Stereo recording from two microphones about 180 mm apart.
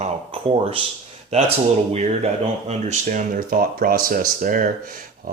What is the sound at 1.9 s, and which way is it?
Speech, 40° right (ahead or behind).